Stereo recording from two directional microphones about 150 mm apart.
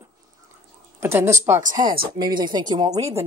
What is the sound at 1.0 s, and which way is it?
Speech, 15° right (ahead or behind).